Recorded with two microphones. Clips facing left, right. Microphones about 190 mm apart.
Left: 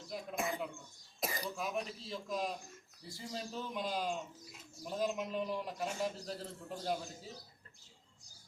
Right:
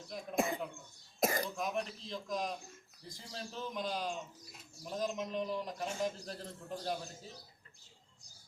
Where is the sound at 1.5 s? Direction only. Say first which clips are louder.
Right 1 dB; 5° left (ahead or behind).